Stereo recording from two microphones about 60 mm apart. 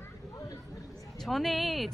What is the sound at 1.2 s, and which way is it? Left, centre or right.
Speech, centre.